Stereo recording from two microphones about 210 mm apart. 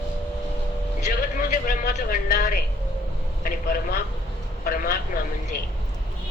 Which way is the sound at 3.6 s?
45° left (ahead or behind).